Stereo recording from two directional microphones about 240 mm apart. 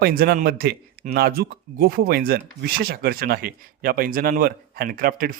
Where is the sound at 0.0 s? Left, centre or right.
Right.